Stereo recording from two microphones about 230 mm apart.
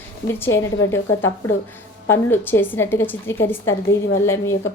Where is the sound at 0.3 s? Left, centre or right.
Centre.